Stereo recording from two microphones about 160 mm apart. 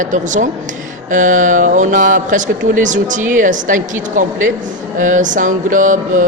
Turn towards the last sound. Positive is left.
turn(degrees=-55)  # may be behind; listen again after turning